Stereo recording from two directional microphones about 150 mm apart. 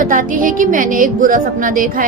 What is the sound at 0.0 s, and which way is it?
A woman's voice, 65° right (ahead or behind).